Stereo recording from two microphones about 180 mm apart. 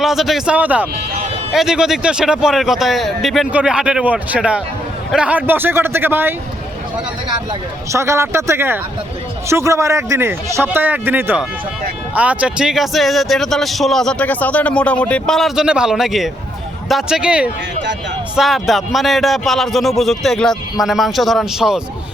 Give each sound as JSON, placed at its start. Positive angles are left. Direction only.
{"t": 0.0, "sound": "speech", "side_deg": 0}
{"t": 7.9, "sound": "speech", "side_deg": -15}